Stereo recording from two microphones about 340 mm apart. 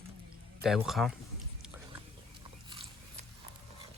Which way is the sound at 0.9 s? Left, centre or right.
Centre.